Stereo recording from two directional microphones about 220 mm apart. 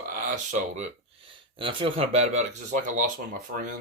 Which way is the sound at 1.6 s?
25° right (ahead or behind).